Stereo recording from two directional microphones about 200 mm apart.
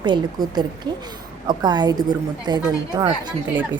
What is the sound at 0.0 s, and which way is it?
A woman's voice, 20° right (ahead or behind).